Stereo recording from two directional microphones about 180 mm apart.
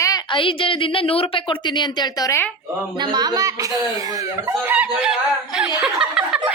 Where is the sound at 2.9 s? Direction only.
25° right (ahead or behind).